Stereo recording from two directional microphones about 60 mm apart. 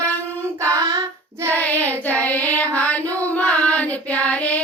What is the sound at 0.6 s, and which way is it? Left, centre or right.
Child singing, right.